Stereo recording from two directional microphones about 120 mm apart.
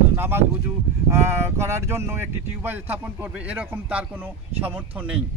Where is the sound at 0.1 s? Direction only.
20° right (ahead or behind).